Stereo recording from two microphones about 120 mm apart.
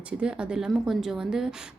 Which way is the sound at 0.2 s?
5° right (ahead or behind).